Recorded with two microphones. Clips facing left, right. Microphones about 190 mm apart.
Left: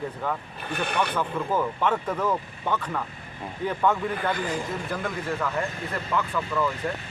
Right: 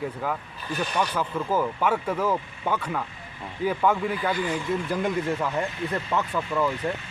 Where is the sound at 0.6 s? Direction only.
60° left (ahead or behind).